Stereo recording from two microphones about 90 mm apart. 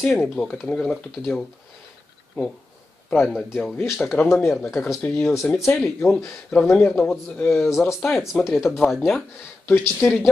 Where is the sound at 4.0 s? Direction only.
15° left (ahead or behind).